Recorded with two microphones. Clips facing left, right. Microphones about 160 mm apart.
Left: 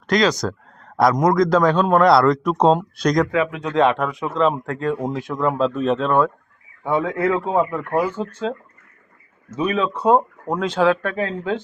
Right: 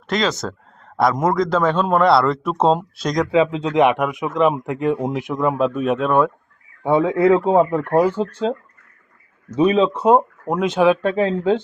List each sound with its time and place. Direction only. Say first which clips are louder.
0.1 s a man's voice: left 3 dB; centre (ahead or behind)
3.3 s speech: right 3 dB; 25° right (ahead or behind)
6.8 s speech: right 5 dB; 25° right (ahead or behind)
9.6 s speech: right 6 dB; 25° right (ahead or behind)